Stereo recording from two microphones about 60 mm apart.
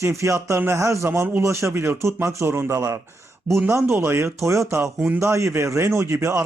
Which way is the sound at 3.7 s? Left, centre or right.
Right.